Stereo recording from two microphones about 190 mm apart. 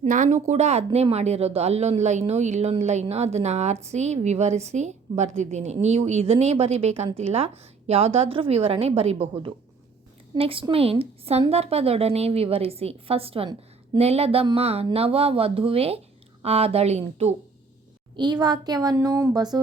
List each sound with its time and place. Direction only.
0.0 s a woman's voice: 40° right (ahead or behind)
18.2 s a woman's voice: 20° right (ahead or behind)